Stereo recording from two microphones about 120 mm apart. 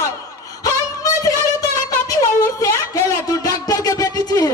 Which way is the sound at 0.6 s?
30° left (ahead or behind).